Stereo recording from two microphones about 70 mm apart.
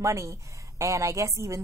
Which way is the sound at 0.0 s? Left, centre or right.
Right.